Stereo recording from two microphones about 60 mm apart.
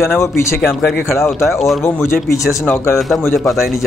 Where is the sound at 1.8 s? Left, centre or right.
Left.